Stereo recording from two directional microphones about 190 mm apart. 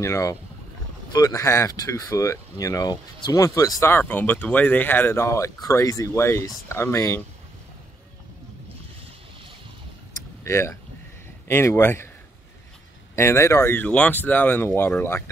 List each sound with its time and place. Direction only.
0.0 s speech: 15° left (ahead or behind)
10.4 s speech: 15° left (ahead or behind)
13.1 s speech: 15° left (ahead or behind)